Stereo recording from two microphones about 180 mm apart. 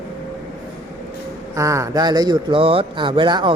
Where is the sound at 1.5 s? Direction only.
15° right (ahead or behind).